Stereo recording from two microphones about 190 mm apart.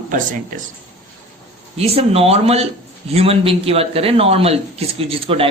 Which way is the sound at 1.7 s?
30° right (ahead or behind).